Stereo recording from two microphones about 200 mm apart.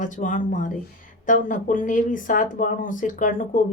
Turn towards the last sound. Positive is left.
turn(degrees=40)  # may be behind; listen again after turning